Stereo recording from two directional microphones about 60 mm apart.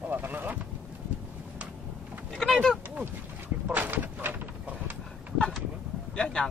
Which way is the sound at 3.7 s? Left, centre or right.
Right.